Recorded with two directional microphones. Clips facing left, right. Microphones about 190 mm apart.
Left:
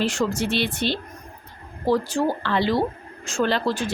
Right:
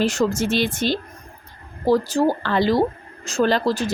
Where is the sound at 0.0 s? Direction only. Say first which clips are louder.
Right 3 dB; 40° right (ahead or behind).